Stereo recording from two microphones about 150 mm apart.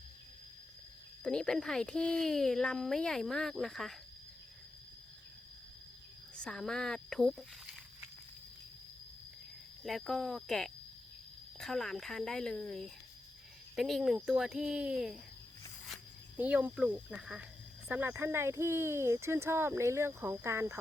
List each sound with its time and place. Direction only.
1.2 s speech: 5° left (ahead or behind)
6.3 s speech: 5° left (ahead or behind)
9.8 s speech: centre (ahead or behind)
16.4 s speech: 10° right (ahead or behind)